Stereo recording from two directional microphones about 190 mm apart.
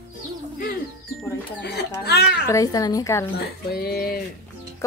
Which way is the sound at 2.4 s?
15° left (ahead or behind).